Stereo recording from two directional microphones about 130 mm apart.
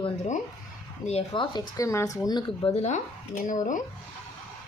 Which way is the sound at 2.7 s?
60° left (ahead or behind).